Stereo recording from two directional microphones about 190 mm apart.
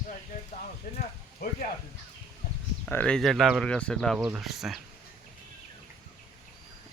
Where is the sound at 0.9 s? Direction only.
50° left (ahead or behind).